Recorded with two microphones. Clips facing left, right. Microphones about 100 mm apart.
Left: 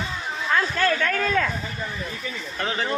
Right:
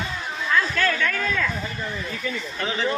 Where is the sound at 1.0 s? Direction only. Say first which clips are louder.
Left 2 dB; 40° left (ahead or behind).